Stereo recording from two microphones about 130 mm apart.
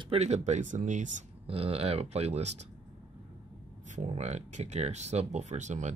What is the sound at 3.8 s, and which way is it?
Speech, 65° right (ahead or behind).